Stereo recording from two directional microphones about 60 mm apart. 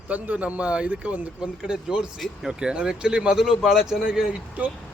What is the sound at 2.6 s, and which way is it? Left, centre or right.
Speech, centre.